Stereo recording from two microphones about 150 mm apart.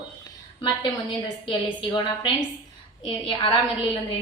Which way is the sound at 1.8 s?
30° left (ahead or behind).